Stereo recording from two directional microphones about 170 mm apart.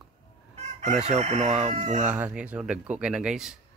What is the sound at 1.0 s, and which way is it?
Speech, 40° right (ahead or behind).